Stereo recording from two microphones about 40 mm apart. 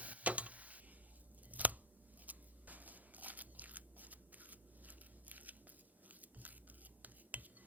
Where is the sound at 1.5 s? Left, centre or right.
Right.